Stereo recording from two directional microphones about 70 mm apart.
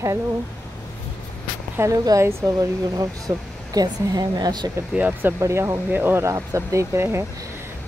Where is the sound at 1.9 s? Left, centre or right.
Right.